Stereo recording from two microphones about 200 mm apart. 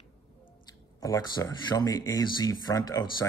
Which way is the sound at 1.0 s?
20° left (ahead or behind).